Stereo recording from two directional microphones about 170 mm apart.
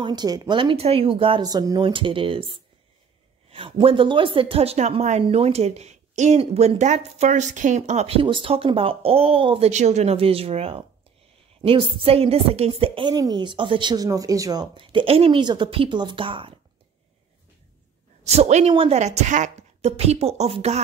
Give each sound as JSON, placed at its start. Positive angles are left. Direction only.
{"t": 0.0, "sound": "a woman's voice", "side_deg": -25}
{"t": 18.2, "sound": "speech", "side_deg": -40}